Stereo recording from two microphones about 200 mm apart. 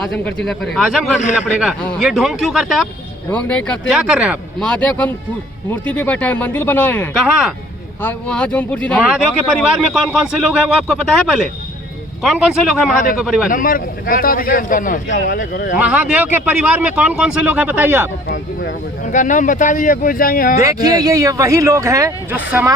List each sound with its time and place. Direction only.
0.0 s speech: 5° left (ahead or behind)
3.2 s speech: 10° left (ahead or behind)
9.0 s speech: 5° right (ahead or behind)
12.9 s speech: 40° left (ahead or behind)
13.1 s speech: centre (ahead or behind)
13.5 s a man's voice: 45° left (ahead or behind)
15.8 s speech: 5° right (ahead or behind)
18.3 s speech: 45° left (ahead or behind)
20.8 s speech: 20° right (ahead or behind)